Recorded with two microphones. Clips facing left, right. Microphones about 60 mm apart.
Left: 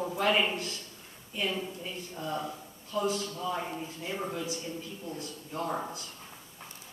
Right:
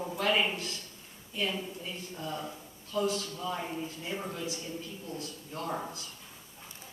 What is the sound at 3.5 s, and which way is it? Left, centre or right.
Speech, centre.